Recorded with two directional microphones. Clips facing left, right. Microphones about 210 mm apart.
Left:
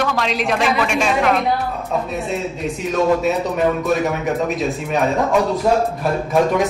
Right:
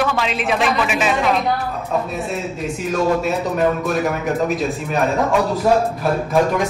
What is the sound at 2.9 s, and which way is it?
A man's voice, centre (ahead or behind).